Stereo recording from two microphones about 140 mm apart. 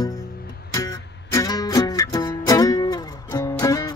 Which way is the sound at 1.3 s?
25° left (ahead or behind).